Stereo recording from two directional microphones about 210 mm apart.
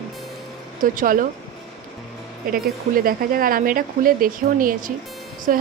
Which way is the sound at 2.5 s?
45° right (ahead or behind).